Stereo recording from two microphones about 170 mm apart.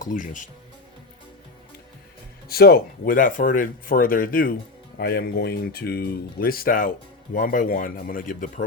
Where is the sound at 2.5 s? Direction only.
65° left (ahead or behind).